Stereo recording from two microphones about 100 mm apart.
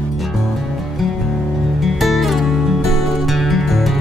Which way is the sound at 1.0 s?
Centre (ahead or behind).